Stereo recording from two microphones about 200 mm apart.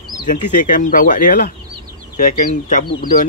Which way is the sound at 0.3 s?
40° left (ahead or behind).